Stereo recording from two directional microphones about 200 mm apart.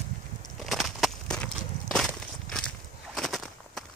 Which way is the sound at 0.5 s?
Centre (ahead or behind).